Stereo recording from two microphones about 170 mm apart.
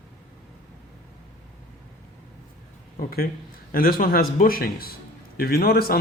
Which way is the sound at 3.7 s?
60° left (ahead or behind).